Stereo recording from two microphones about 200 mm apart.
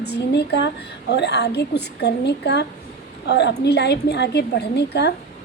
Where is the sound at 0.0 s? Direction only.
55° left (ahead or behind).